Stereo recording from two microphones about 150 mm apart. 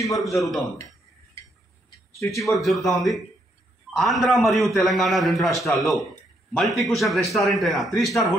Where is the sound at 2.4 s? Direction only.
Centre (ahead or behind).